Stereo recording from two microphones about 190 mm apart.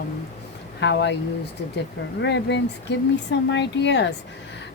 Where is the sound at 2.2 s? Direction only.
65° left (ahead or behind).